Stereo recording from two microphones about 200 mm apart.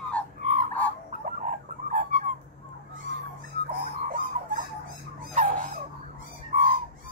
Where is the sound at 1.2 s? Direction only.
40° right (ahead or behind).